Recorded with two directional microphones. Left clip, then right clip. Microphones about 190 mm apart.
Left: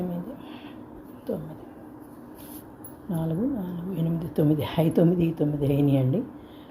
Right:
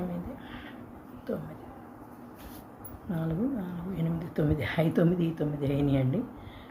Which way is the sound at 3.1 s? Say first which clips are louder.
Left 4 dB; 15° left (ahead or behind).